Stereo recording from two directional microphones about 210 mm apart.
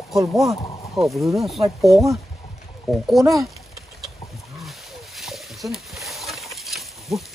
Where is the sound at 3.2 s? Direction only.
15° right (ahead or behind).